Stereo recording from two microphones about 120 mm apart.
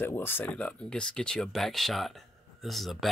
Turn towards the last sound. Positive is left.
turn(degrees=0)  # may be behind; listen again after turning